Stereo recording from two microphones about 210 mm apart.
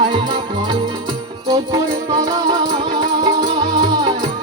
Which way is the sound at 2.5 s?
20° right (ahead or behind).